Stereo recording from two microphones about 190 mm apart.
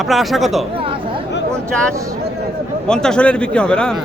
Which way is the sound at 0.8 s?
30° right (ahead or behind).